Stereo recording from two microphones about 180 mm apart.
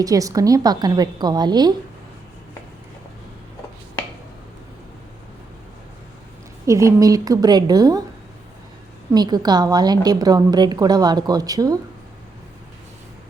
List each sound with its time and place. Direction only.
0.0 s a woman's voice: 20° right (ahead or behind)
6.7 s a woman's voice: 15° right (ahead or behind)
9.1 s a woman's voice: 20° right (ahead or behind)